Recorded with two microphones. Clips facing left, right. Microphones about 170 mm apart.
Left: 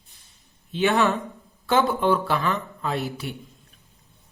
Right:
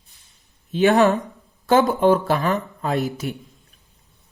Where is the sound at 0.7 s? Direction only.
40° right (ahead or behind).